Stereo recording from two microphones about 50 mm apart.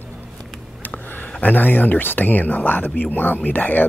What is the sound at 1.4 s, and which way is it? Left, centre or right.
Speech, left.